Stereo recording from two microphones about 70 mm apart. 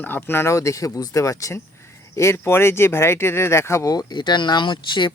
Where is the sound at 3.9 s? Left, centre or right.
Left.